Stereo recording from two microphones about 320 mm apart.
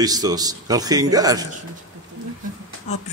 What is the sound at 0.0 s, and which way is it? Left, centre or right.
A man's voice, centre.